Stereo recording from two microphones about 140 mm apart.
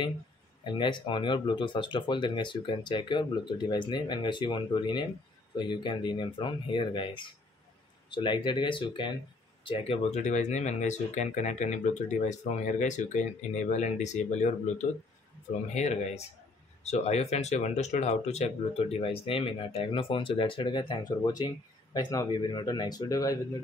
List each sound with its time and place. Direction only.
0.7 s speech: 35° left (ahead or behind)
10.1 s speech: 55° left (ahead or behind); by 23.4 s 25° left (ahead or behind)